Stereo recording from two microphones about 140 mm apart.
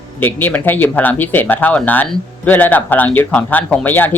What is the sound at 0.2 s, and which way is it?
Speech, 15° left (ahead or behind).